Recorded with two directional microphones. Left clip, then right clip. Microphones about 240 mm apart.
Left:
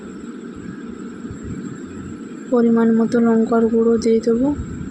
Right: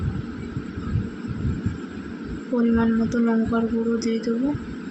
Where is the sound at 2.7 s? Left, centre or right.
Centre.